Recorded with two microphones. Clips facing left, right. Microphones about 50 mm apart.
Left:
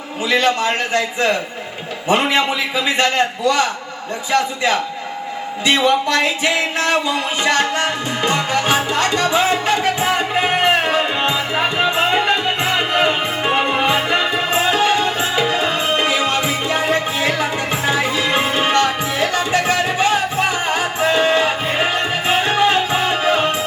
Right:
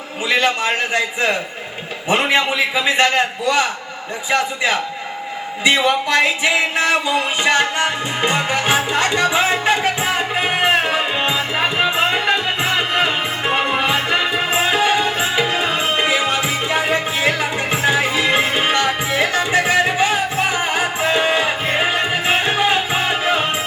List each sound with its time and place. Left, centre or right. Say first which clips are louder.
0.3 s music: left 1 dB; right
3.2 s a man's voice: left 1 dB; centre
4.3 s music: left 1 dB; centre
10.0 s music: left 2 dB; centre
15.8 s music: left 1 dB; centre
16.0 s music: even; centre